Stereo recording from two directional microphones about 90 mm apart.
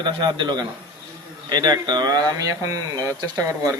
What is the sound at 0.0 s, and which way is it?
A man's voice, 60° right (ahead or behind).